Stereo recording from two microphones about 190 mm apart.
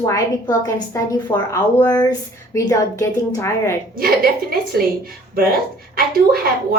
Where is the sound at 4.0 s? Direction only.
50° right (ahead or behind).